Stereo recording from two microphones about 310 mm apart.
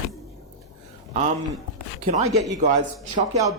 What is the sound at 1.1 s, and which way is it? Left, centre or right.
Speech, right.